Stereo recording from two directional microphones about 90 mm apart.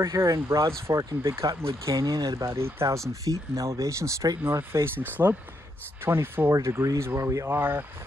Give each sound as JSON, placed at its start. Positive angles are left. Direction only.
{"t": 0.0, "sound": "speech", "side_deg": -40}
{"t": 2.5, "sound": "speech", "side_deg": -30}
{"t": 4.4, "sound": "speech", "side_deg": -25}